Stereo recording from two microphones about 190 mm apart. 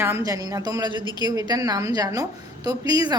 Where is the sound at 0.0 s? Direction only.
15° right (ahead or behind).